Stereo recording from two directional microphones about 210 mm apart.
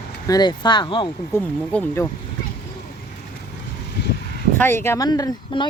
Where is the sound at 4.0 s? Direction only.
55° left (ahead or behind).